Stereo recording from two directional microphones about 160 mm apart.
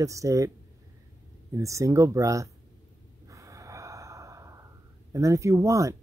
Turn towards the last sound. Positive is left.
turn(degrees=-20)  # may be behind; listen again after turning